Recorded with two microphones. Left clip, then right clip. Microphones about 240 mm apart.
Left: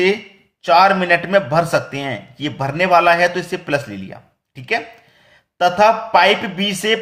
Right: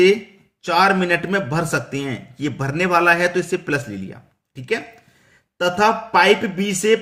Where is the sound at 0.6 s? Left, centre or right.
Centre.